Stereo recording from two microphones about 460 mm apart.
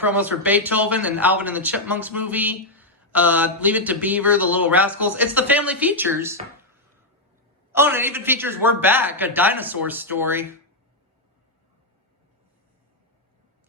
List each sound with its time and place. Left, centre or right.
0.0 s speech: centre
7.7 s speech: centre